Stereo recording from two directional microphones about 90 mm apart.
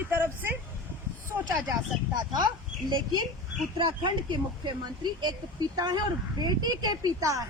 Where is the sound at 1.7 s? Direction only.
50° right (ahead or behind).